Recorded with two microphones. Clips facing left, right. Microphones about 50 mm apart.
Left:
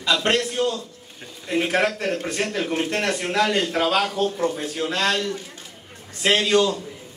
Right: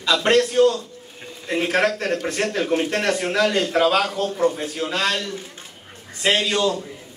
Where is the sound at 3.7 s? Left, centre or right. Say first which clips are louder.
Right 3 dB; centre.